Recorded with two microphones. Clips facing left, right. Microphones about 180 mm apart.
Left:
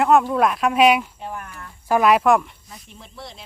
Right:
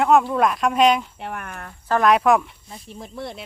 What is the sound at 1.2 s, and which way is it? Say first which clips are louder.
Cricket: right 1 dB; 70° right (ahead or behind).